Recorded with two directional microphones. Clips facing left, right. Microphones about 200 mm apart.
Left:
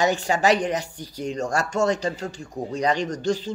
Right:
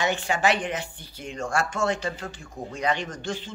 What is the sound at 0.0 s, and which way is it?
Speech, 40° left (ahead or behind).